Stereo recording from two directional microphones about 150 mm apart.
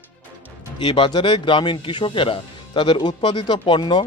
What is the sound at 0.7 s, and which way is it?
Speech, 35° left (ahead or behind).